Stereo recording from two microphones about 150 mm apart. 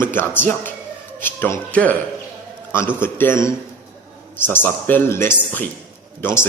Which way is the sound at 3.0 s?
15° left (ahead or behind).